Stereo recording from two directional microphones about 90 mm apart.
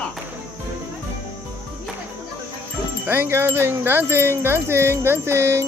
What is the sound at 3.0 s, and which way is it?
Wind chime, 20° right (ahead or behind).